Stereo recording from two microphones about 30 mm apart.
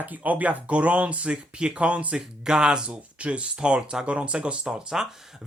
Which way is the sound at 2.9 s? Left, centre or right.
Right.